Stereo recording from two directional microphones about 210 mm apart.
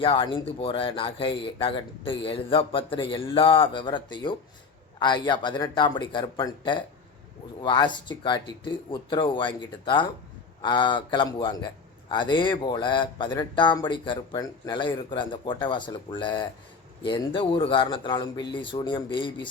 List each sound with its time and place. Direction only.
0.0 s speech: 25° left (ahead or behind)